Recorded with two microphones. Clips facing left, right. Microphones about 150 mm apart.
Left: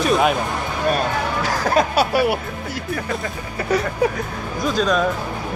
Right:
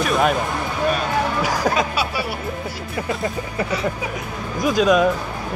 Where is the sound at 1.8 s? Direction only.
45° left (ahead or behind).